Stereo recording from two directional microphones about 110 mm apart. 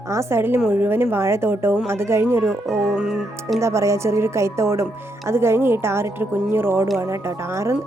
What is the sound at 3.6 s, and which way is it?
A woman's voice, 25° right (ahead or behind).